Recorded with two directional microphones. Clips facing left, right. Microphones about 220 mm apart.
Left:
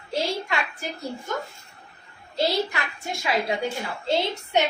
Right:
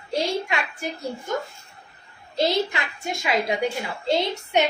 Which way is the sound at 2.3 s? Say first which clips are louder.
Right 2 dB; 20° right (ahead or behind).